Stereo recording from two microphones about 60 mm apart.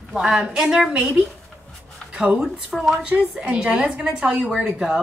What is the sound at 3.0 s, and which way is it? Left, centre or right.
A woman's voice, centre.